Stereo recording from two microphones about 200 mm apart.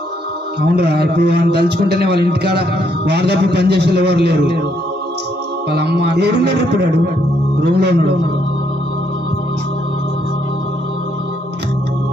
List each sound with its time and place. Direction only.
0.6 s a man's voice: 55° right (ahead or behind)
5.7 s a man's voice: 55° right (ahead or behind)